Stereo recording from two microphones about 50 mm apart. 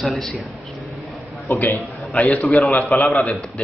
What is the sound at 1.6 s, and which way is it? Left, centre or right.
Speech, left.